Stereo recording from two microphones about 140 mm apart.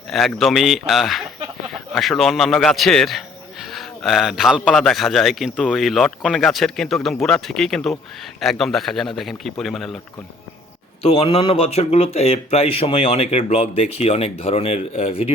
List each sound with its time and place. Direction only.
0.1 s a man's voice: centre (ahead or behind)
11.0 s speech: 45° left (ahead or behind)